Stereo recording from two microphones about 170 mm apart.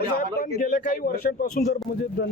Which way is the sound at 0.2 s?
55° left (ahead or behind).